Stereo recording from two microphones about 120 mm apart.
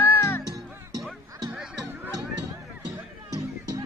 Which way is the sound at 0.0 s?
20° left (ahead or behind).